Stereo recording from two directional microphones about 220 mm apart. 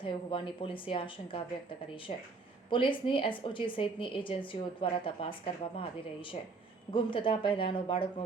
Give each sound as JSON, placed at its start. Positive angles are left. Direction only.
{"t": 0.0, "sound": "a woman's voice", "side_deg": 25}